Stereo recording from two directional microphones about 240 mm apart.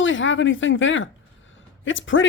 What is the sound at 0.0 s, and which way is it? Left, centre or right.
Speech, left.